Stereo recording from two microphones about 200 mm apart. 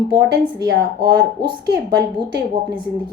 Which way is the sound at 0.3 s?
55° right (ahead or behind).